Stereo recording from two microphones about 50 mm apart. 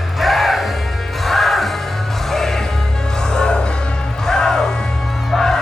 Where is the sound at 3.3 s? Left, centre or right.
Centre.